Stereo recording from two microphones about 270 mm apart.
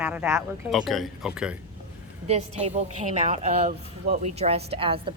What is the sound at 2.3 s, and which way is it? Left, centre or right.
Speech, right.